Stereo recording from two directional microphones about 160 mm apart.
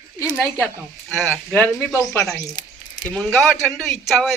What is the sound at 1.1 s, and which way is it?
Speech, centre (ahead or behind).